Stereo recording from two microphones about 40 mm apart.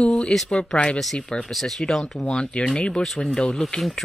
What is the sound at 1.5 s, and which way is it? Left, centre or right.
Speech, centre.